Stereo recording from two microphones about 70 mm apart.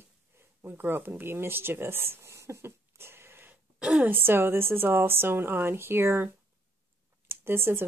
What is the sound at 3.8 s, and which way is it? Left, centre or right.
Speech, centre.